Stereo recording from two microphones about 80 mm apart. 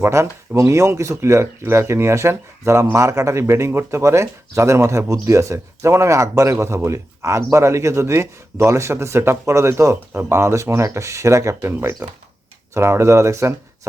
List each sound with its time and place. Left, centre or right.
0.0 s speech: right
10.1 s speech: right
10.3 s speech: right